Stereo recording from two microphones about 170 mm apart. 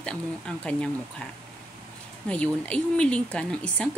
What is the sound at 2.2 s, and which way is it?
Speech, 5° left (ahead or behind).